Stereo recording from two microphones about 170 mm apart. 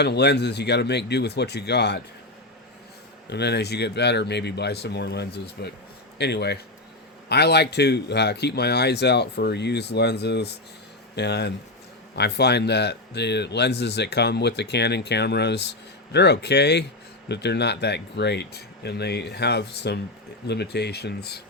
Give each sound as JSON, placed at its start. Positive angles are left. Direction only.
{"t": 0.0, "sound": "a man's voice", "side_deg": 80}
{"t": 3.2, "sound": "a man's voice", "side_deg": 80}